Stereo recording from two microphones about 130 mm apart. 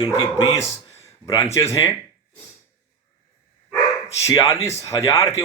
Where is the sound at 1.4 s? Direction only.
25° left (ahead or behind).